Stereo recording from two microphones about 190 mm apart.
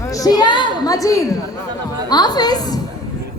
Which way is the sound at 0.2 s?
20° left (ahead or behind).